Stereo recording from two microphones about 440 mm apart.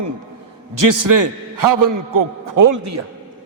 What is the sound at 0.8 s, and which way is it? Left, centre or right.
A man's voice, right.